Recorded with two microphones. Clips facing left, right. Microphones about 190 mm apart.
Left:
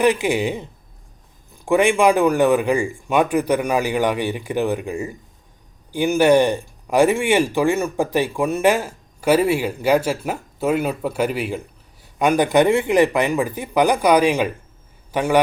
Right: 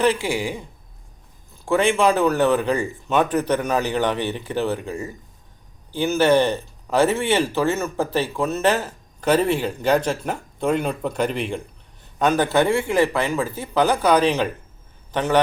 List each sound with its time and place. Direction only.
0.0 s a woman's voice: 15° left (ahead or behind)